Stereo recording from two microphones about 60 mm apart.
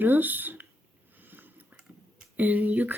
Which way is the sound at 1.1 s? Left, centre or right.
Right.